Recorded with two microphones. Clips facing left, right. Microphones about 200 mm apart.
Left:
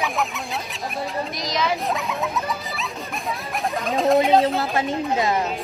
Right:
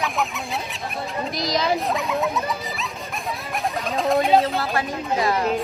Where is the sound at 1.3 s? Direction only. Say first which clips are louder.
Right 4 dB; 35° right (ahead or behind).